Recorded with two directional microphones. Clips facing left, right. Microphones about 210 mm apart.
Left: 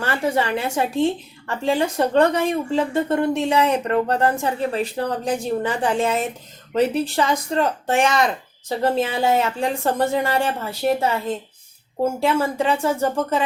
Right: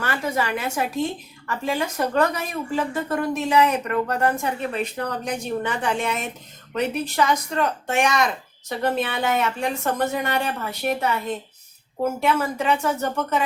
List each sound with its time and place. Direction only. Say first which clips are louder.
0.0 s a woman's voice: left 4 dB; 30° left (ahead or behind)